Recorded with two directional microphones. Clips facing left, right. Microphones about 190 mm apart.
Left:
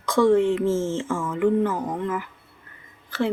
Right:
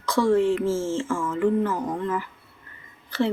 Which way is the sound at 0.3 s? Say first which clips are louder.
Even; 20° left (ahead or behind).